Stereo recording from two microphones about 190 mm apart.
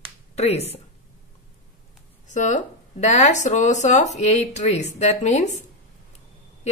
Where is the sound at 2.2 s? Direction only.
40° left (ahead or behind).